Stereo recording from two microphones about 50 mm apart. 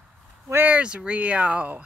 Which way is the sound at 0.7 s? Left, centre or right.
Centre.